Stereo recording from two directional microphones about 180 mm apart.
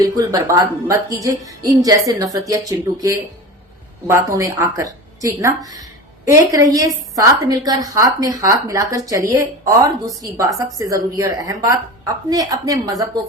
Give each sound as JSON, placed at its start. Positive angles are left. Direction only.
{"t": 0.0, "sound": "a woman's voice", "side_deg": -20}